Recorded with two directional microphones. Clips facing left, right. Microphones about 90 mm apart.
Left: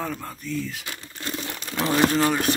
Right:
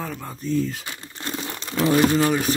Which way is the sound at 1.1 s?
20° right (ahead or behind).